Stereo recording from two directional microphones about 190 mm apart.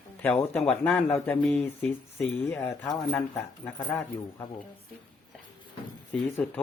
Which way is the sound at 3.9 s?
10° left (ahead or behind).